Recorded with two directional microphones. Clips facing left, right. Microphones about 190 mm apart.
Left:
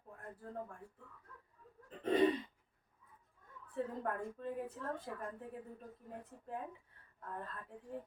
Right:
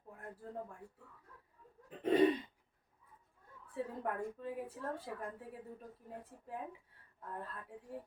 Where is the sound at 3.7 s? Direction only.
5° right (ahead or behind).